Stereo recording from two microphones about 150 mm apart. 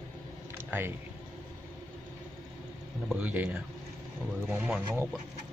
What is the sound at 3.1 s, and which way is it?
Speech, 10° right (ahead or behind).